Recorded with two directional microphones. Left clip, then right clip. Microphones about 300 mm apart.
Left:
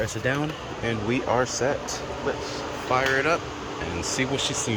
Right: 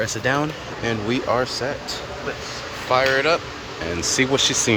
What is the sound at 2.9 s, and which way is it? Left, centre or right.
Speech, centre.